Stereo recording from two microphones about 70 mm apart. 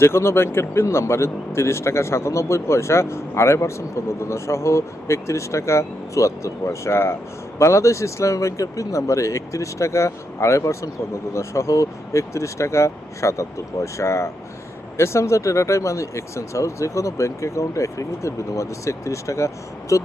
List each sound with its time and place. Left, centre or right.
0.0 s a man's voice: left